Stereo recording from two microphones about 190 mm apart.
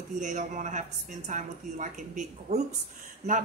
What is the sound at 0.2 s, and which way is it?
A woman's voice, 40° right (ahead or behind).